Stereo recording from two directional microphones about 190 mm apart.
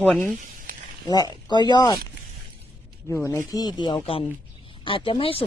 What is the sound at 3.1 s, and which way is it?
Speech, 15° left (ahead or behind).